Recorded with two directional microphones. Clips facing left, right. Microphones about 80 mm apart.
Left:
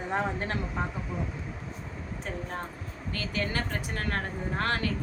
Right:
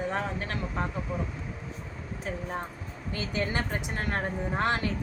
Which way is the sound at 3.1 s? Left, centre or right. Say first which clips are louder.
Right 1 dB; centre.